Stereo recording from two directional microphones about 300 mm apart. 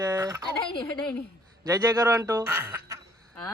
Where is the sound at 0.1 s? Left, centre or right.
Centre.